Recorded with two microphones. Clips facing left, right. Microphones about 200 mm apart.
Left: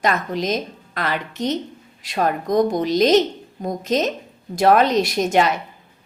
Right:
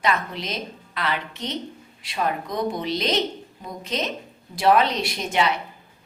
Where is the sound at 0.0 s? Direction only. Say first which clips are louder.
Left 4 dB; 45° left (ahead or behind).